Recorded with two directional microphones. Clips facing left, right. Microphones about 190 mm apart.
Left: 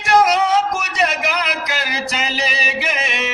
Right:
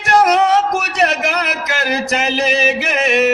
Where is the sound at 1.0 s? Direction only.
50° right (ahead or behind).